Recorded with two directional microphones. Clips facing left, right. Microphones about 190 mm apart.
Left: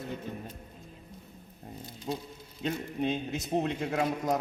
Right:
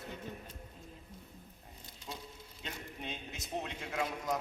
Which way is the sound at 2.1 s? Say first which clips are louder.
Left 11 dB; 45° left (ahead or behind).